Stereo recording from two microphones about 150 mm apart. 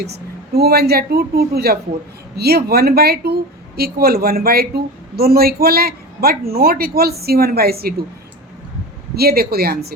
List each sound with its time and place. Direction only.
0.0 s a woman's voice: 90° right
9.1 s a woman's voice: 90° right